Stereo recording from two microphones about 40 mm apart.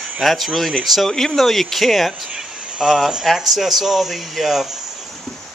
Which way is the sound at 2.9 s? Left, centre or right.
Centre.